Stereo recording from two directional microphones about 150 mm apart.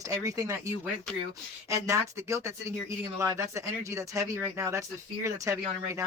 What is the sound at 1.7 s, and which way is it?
Speech, 20° right (ahead or behind).